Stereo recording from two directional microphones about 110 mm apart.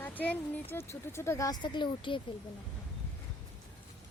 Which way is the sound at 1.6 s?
45° left (ahead or behind).